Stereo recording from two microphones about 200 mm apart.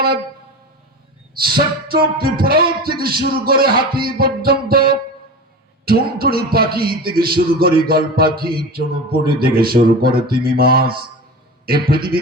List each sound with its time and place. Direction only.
1.9 s music: 50° right (ahead or behind)